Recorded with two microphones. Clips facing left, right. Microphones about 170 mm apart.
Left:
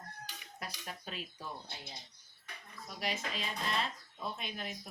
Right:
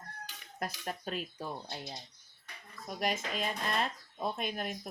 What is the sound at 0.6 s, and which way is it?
Speech, 50° right (ahead or behind).